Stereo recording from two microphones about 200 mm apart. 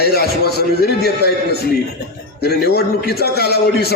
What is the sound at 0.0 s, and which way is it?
A man's voice, 50° left (ahead or behind).